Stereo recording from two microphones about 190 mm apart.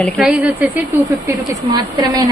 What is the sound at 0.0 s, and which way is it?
Speech, 5° right (ahead or behind).